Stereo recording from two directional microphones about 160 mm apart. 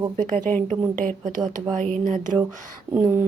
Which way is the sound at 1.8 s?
55° right (ahead or behind).